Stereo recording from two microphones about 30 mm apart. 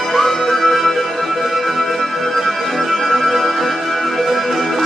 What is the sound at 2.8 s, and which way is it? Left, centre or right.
Music, centre.